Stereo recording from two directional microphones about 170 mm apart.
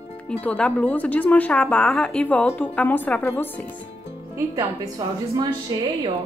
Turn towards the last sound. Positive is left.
turn(degrees=-20)  # may be behind; listen again after turning